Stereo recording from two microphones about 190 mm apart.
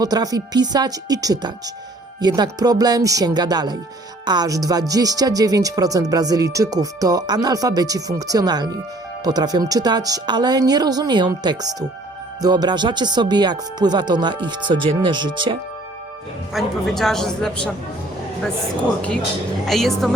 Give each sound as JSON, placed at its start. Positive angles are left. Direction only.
{"t": 0.0, "sound": "speech", "side_deg": -20}
{"t": 16.5, "sound": "a man's voice", "side_deg": 0}
{"t": 19.6, "sound": "a man's voice", "side_deg": 0}